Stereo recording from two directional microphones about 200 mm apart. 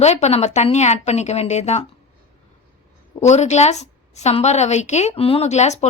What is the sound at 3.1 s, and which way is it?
A woman's voice, 35° left (ahead or behind).